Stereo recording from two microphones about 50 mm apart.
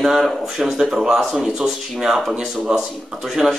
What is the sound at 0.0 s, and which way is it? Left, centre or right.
Speech, centre.